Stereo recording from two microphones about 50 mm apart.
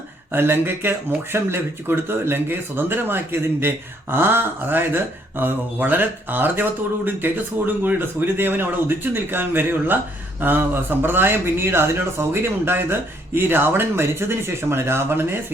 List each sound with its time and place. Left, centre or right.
0.3 s speech: right